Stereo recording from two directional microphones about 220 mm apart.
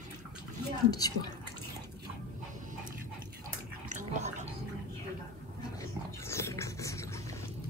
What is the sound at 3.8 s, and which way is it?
Bathtub, 35° right (ahead or behind).